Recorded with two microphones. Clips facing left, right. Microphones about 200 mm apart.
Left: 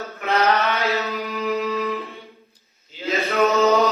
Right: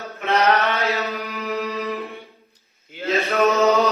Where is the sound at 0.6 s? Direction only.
Centre (ahead or behind).